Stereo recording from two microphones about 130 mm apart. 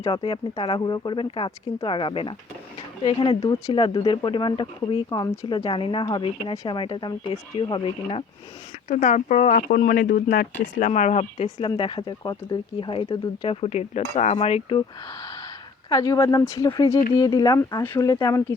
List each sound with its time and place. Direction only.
0.1 s speech: 45° left (ahead or behind)
8.9 s speech: 65° left (ahead or behind)
11.6 s speech: 40° left (ahead or behind)
15.9 s speech: 25° left (ahead or behind)